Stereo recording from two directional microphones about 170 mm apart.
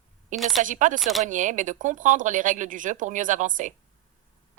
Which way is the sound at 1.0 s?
Centre (ahead or behind).